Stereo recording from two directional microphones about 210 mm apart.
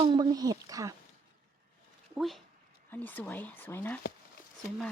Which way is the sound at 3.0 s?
10° left (ahead or behind).